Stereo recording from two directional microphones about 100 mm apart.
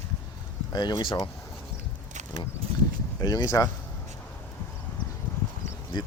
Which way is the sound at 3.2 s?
40° left (ahead or behind).